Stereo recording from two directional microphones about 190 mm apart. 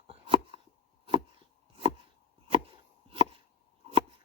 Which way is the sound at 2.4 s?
30° right (ahead or behind).